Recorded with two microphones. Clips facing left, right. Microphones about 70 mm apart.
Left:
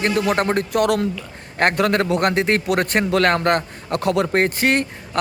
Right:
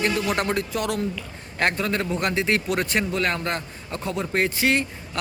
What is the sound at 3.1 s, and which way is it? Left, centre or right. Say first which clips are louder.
Speech: left 8 dB; left.